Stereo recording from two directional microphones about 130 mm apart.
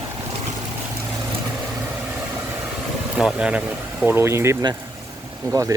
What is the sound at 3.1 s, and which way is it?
Speech, 5° right (ahead or behind).